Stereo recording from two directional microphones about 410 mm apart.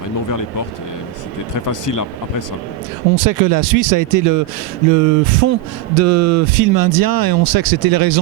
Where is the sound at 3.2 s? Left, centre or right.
Right.